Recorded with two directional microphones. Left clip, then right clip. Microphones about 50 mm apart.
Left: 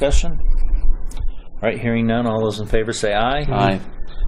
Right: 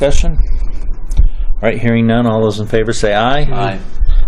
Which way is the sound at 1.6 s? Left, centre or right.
Centre.